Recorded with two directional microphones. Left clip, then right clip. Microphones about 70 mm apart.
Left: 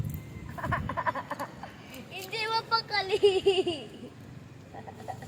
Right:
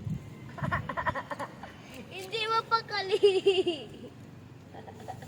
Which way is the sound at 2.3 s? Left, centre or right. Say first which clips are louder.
Right 1 dB; centre.